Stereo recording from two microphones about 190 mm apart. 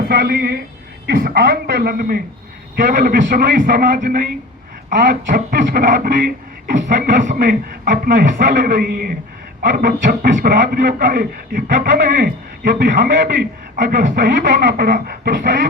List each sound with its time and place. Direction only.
0.1 s a woman's voice: 55° right (ahead or behind)